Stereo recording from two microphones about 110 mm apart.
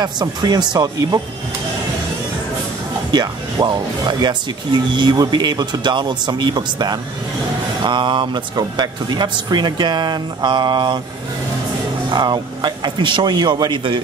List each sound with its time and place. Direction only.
0.0 s speech: 40° right (ahead or behind)
3.1 s speech: 40° right (ahead or behind)
12.1 s speech: 40° right (ahead or behind)